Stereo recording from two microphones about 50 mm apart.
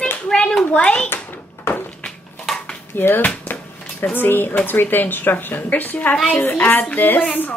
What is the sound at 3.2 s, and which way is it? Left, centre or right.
Speech, left.